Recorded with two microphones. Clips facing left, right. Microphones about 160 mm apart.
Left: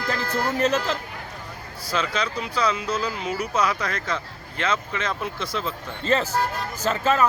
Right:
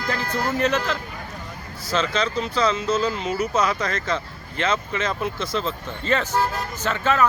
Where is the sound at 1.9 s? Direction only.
10° left (ahead or behind).